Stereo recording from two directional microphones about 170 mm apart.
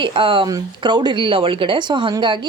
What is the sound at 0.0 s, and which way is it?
Speech, 30° right (ahead or behind).